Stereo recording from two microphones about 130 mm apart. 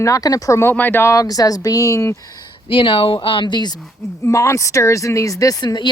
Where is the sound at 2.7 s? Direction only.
45° left (ahead or behind).